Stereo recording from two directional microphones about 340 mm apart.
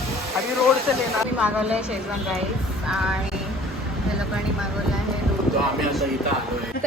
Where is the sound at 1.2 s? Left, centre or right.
Centre.